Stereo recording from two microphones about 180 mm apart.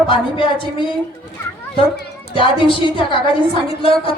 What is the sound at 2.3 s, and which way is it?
Speech, 30° left (ahead or behind).